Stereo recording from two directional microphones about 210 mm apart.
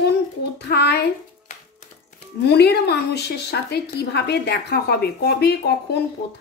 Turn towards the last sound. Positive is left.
turn(degrees=50)  # may be behind; listen again after turning